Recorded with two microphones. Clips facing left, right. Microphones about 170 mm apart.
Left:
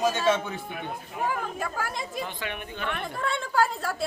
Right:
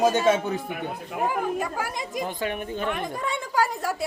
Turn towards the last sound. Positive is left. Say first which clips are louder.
# right 1 dB
turn(degrees=-15)  # may be behind; listen again after turning